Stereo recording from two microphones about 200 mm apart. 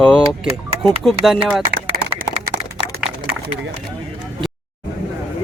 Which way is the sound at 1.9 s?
45° right (ahead or behind).